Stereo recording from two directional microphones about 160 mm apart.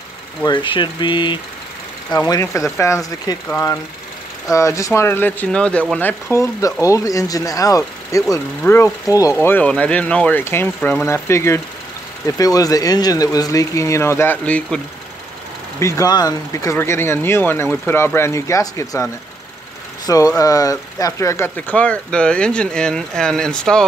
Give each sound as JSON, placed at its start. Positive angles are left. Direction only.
{"t": 0.5, "sound": "speech", "side_deg": 30}
{"t": 2.2, "sound": "speech", "side_deg": 20}
{"t": 15.8, "sound": "speech", "side_deg": 20}
{"t": 20.1, "sound": "speech", "side_deg": 20}